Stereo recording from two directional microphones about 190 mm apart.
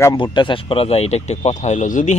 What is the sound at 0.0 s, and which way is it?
Speech, 20° left (ahead or behind).